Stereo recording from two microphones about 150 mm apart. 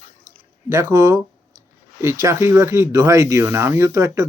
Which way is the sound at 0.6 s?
20° right (ahead or behind).